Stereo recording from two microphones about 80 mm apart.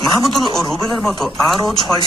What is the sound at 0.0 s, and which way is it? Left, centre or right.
Speech, centre.